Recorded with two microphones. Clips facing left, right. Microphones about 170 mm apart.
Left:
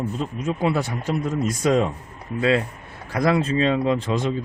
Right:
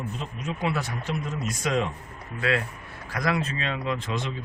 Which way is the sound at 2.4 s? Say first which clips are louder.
Left 6 dB; 25° left (ahead or behind).